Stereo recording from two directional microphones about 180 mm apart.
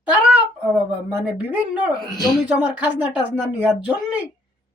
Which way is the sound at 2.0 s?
20° left (ahead or behind).